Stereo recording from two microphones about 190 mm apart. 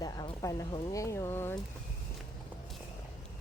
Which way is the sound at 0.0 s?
20° left (ahead or behind).